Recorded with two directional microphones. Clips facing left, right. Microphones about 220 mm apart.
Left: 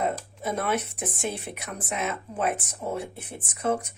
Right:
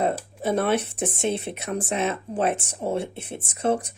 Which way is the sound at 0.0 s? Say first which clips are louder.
Right 4 dB; 30° right (ahead or behind).